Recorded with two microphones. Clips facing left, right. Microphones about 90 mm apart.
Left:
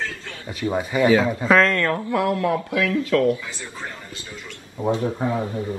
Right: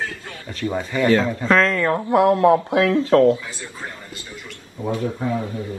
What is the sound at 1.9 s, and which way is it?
Speech, 25° right (ahead or behind).